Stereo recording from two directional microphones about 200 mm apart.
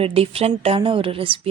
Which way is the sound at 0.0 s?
30° right (ahead or behind).